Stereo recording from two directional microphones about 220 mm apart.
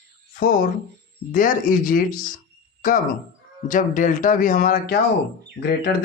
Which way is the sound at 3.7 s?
35° left (ahead or behind).